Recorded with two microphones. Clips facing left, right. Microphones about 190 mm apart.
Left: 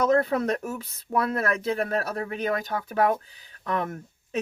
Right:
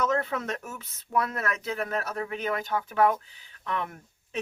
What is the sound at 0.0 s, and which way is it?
Speech, 35° left (ahead or behind).